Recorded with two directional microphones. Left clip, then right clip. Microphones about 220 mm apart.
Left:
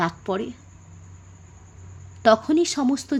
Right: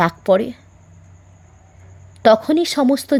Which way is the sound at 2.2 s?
30° right (ahead or behind).